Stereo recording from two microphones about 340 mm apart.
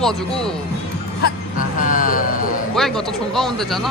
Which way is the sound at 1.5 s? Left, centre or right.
Left.